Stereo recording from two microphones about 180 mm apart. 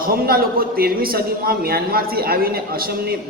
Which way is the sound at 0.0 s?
55° right (ahead or behind).